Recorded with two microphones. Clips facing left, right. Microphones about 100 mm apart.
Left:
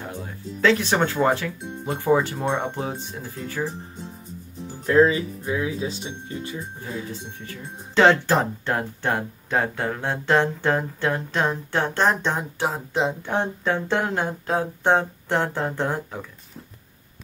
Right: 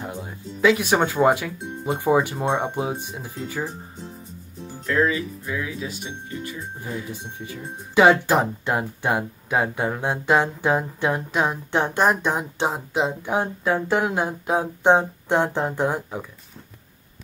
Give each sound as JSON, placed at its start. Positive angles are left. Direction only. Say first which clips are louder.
{"t": 0.0, "sound": "speech", "louder": "right 1 dB", "side_deg": -15}
{"t": 4.8, "sound": "speech", "louder": "left 4 dB", "side_deg": 25}
{"t": 6.8, "sound": "speech", "louder": "right 1 dB", "side_deg": -15}
{"t": 12.5, "sound": "speech", "louder": "right 1 dB", "side_deg": -20}
{"t": 12.9, "sound": "speech", "louder": "left 1 dB", "side_deg": -10}